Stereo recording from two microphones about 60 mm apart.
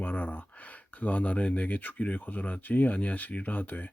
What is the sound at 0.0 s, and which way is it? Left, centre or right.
Speech, left.